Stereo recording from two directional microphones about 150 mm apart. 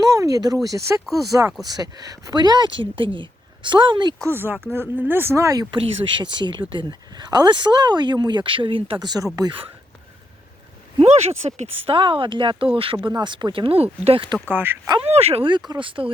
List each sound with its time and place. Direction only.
0.0 s speech: 20° right (ahead or behind)
4.2 s speech: 15° right (ahead or behind)
5.8 s speech: 30° right (ahead or behind)
11.0 s speech: 45° right (ahead or behind)
14.5 s speech: 15° right (ahead or behind)
15.0 s speech: 45° right (ahead or behind)